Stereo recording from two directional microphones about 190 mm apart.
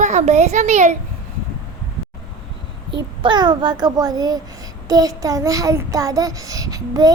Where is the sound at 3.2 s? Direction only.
25° right (ahead or behind).